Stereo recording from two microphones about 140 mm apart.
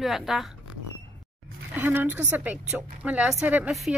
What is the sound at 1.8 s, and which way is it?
A woman's voice, 15° right (ahead or behind).